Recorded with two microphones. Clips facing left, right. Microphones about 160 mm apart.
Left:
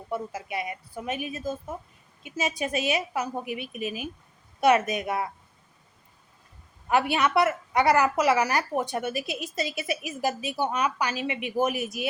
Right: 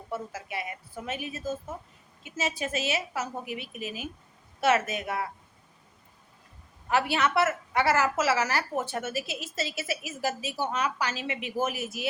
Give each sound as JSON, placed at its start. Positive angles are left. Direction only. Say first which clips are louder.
{"t": 0.1, "sound": "a woman's voice", "louder": "left 3 dB", "side_deg": 15}
{"t": 6.9, "sound": "a woman's voice", "louder": "left 2 dB", "side_deg": 15}